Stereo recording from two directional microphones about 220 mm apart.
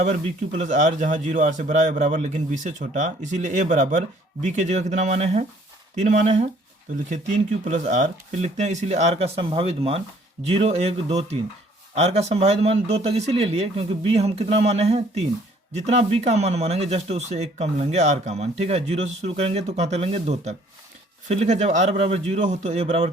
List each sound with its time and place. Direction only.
0.0 s speech: 35° right (ahead or behind)
7.6 s speech: 35° right (ahead or behind)